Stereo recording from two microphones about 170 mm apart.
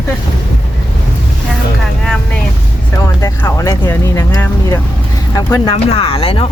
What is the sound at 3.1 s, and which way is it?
Speech, 20° left (ahead or behind).